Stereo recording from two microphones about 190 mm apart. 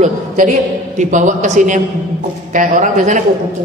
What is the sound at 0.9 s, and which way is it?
A woman's voice, 40° right (ahead or behind).